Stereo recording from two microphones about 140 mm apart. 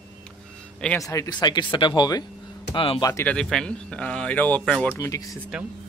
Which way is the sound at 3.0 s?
25° left (ahead or behind).